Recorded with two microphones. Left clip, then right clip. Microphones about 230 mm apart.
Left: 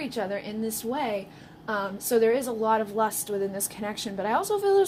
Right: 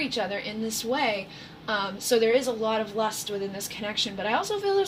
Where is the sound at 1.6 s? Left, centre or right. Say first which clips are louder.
Right 1 dB; left.